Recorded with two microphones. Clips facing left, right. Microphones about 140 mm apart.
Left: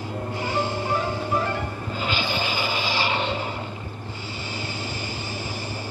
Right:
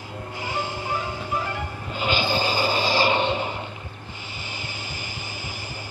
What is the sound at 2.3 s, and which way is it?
Rub, 35° right (ahead or behind).